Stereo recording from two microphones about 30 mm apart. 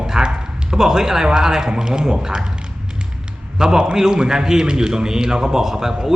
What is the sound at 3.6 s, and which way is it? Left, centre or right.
A man's voice, right.